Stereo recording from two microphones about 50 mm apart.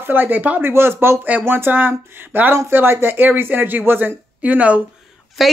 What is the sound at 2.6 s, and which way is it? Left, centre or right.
Speech, right.